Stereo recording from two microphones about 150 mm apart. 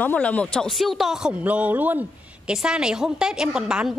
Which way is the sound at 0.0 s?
10° left (ahead or behind).